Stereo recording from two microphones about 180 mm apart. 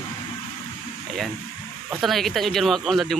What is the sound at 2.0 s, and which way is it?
Speech, centre (ahead or behind).